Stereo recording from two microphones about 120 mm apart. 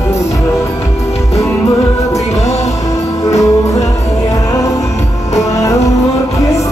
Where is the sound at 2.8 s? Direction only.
30° left (ahead or behind).